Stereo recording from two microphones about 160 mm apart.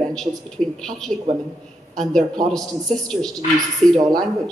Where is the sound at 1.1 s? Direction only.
45° right (ahead or behind).